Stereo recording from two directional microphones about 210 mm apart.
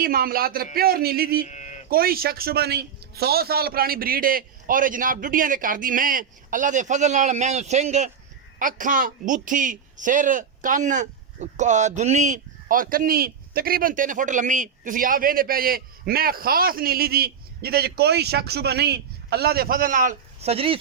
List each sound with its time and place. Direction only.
0.0 s speech: 45° right (ahead or behind)
1.5 s a sound: 35° left (ahead or behind)
1.9 s a man's voice: 45° right (ahead or behind); by 20.7 s 30° right (ahead or behind)